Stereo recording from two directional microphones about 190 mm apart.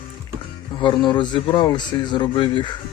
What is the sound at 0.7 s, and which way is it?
Speech, 25° left (ahead or behind).